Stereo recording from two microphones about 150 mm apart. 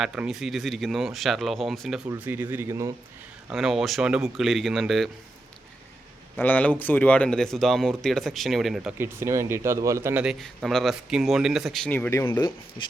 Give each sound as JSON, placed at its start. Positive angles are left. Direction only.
{"t": 0.0, "sound": "speech", "side_deg": -5}
{"t": 2.0, "sound": "speech", "side_deg": -10}
{"t": 3.5, "sound": "speech", "side_deg": 0}
{"t": 6.3, "sound": "speech", "side_deg": 10}
{"t": 9.0, "sound": "speech", "side_deg": -20}
{"t": 10.2, "sound": "speech", "side_deg": 0}
{"t": 12.2, "sound": "speech", "side_deg": 30}